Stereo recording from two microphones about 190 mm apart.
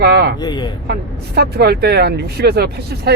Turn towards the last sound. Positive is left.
turn(degrees=-55)  # may be behind; listen again after turning